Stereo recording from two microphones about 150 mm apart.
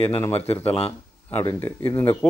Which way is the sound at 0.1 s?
15° left (ahead or behind).